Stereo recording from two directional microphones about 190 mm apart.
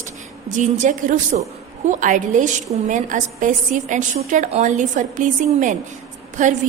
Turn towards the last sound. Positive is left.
turn(degrees=-40)  # may be behind; listen again after turning